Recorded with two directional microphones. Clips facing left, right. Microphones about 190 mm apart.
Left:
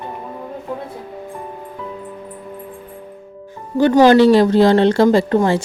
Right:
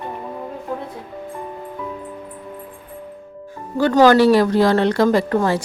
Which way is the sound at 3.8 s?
20° left (ahead or behind).